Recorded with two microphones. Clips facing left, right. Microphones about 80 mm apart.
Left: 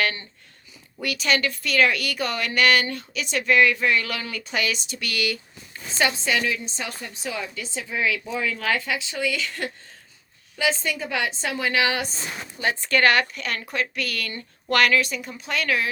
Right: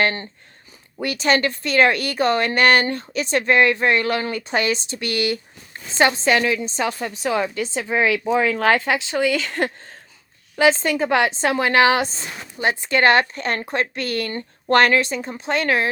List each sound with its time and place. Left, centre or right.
0.0 s a woman's voice: right
6.2 s a woman's voice: right
12.7 s a woman's voice: right